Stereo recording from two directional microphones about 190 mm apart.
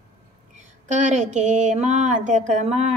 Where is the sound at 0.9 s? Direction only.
40° right (ahead or behind).